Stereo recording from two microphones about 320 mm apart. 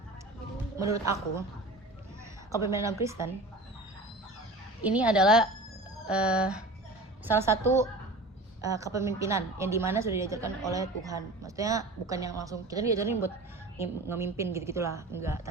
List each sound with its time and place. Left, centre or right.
0.8 s a woman's voice: centre
2.6 s a woman's voice: centre
4.8 s a woman's voice: centre